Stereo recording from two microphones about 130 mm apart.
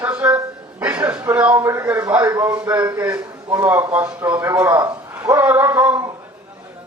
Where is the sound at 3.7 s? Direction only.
15° right (ahead or behind).